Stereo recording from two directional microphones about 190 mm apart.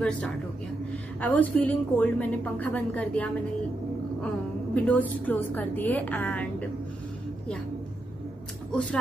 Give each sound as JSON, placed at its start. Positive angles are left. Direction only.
{"t": 1.2, "sound": "a woman's voice", "side_deg": 10}
{"t": 4.7, "sound": "a woman's voice", "side_deg": 10}